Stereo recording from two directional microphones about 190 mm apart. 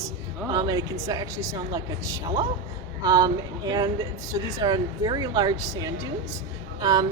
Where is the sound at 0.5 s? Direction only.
20° right (ahead or behind).